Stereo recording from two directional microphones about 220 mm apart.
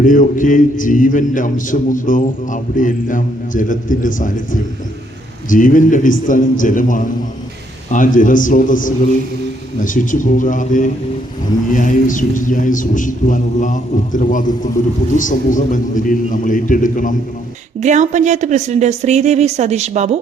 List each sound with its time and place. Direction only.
0.0 s a man's voice: 35° left (ahead or behind)
17.7 s speech: 30° right (ahead or behind)